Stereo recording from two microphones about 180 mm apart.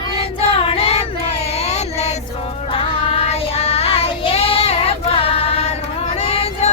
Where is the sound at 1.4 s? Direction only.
35° left (ahead or behind).